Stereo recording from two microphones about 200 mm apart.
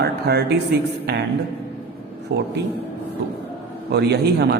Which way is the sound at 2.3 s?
55° right (ahead or behind).